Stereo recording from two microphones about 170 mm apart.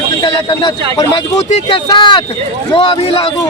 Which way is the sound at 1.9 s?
30° left (ahead or behind).